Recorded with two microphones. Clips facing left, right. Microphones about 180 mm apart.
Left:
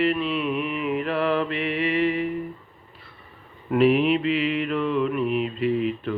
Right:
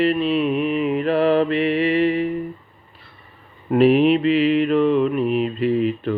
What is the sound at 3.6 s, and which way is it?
Mantra, 35° right (ahead or behind).